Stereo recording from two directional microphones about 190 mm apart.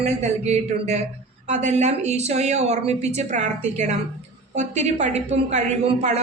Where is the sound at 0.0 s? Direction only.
35° right (ahead or behind).